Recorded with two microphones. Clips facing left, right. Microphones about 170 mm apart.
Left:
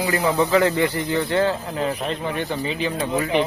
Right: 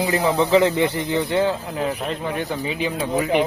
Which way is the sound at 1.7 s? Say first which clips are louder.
Even; 5° right (ahead or behind).